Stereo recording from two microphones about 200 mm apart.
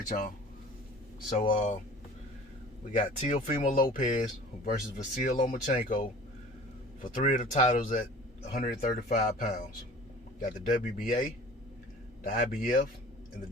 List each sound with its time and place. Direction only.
1.5 s speech: 35° left (ahead or behind)
2.9 s speech: 35° left (ahead or behind)
8.5 s speech: 50° left (ahead or behind)
12.2 s a man's voice: 45° left (ahead or behind)